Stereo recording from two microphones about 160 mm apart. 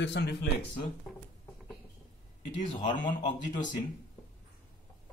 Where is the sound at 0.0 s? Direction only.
90° left.